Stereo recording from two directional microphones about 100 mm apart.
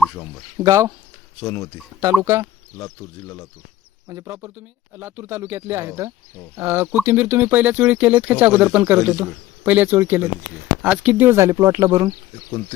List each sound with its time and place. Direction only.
0.6 s speech: 30° right (ahead or behind)
1.5 s speech: 30° left (ahead or behind)
2.0 s speech: 30° right (ahead or behind)
2.7 s speech: 30° left (ahead or behind)
4.1 s speech: 30° right (ahead or behind)
4.4 s speech: 20° right (ahead or behind)